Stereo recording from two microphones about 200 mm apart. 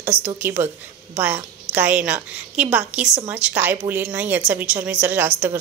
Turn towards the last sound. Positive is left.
turn(degrees=-10)  # may be behind; listen again after turning